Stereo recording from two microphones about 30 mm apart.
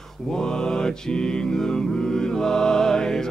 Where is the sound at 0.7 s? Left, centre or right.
Left.